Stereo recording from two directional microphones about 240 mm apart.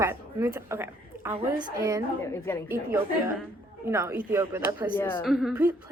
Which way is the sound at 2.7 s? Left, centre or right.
Centre.